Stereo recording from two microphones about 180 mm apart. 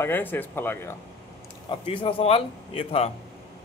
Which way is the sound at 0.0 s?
10° left (ahead or behind).